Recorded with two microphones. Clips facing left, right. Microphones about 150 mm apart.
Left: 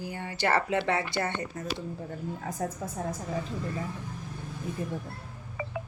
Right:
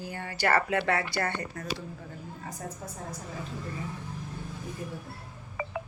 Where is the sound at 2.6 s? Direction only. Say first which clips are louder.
Left 8 dB; 90° left.